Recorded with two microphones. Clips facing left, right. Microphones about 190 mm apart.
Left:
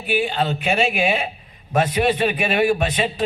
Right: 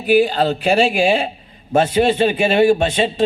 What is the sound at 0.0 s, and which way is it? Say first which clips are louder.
A man's voice: right 7 dB; 40° right (ahead or behind).